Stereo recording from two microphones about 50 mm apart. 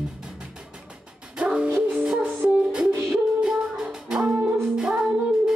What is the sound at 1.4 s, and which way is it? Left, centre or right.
Music, centre.